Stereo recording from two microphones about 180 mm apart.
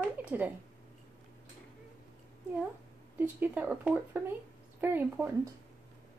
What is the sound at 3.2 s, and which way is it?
Speech, 10° right (ahead or behind).